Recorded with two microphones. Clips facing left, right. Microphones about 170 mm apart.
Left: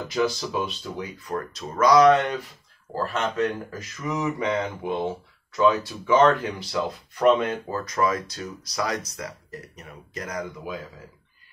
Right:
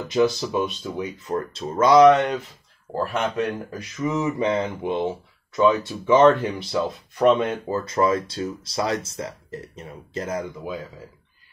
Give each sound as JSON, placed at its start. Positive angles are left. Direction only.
{"t": 0.1, "sound": "speech", "side_deg": -20}
{"t": 2.9, "sound": "speech", "side_deg": -15}
{"t": 4.1, "sound": "speech", "side_deg": -25}